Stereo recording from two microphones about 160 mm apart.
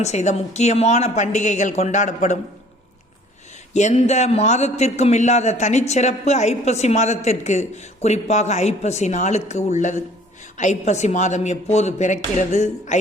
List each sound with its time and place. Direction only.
0.0 s a man's voice: 45° left (ahead or behind)
3.8 s a man's voice: 45° left (ahead or behind)